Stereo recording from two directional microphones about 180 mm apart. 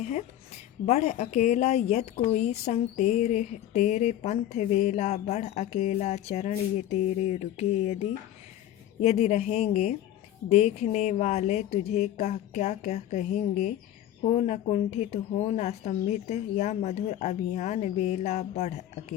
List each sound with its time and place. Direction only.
0.0 s a woman's voice: 40° left (ahead or behind)
9.0 s a woman's voice: 40° left (ahead or behind)